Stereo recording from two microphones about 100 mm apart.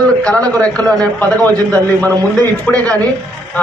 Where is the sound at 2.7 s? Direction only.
15° left (ahead or behind).